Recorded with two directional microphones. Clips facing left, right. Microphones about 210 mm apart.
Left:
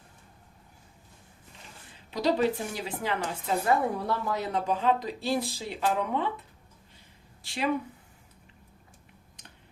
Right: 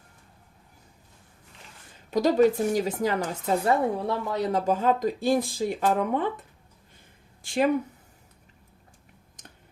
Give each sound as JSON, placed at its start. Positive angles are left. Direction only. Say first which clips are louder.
{"t": 2.0, "sound": "speech", "louder": "right 6 dB", "side_deg": -45}
{"t": 4.0, "sound": "speech", "louder": "right 3 dB", "side_deg": -30}
{"t": 7.4, "sound": "a sound", "louder": "right 8 dB", "side_deg": -50}